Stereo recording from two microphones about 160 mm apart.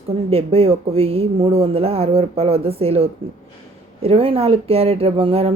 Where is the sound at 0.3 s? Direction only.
40° right (ahead or behind).